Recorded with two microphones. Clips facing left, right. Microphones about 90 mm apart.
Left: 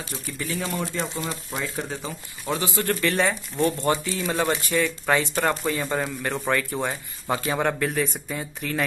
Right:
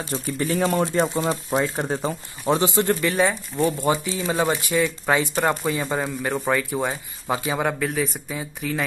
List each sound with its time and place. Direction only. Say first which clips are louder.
0.1 s speech: right 8 dB; 40° right (ahead or behind)
1.2 s speech: right 8 dB; 35° right (ahead or behind)
2.4 s speech: right 6 dB; 25° right (ahead or behind); by 8.8 s 5° right (ahead or behind)